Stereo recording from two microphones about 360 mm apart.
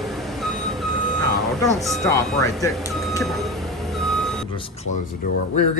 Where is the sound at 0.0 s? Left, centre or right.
Centre.